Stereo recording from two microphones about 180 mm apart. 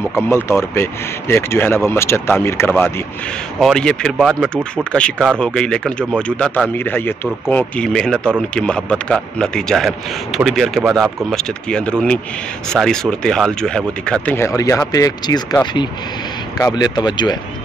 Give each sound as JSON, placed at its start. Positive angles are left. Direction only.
{"t": 0.1, "sound": "speech", "side_deg": 15}